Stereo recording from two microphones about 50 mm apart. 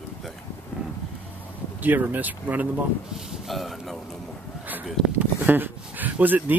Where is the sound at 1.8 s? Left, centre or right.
Right.